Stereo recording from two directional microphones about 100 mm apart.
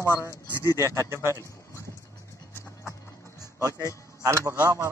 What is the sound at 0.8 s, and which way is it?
Speech, 25° right (ahead or behind).